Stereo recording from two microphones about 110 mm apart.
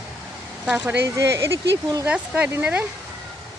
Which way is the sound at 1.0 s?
25° right (ahead or behind).